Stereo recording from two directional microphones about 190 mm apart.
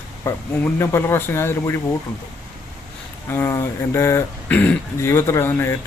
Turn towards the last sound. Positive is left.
turn(degrees=10)  # may be behind; listen again after turning